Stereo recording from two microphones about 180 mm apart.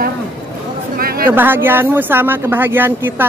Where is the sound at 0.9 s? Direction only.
55° right (ahead or behind).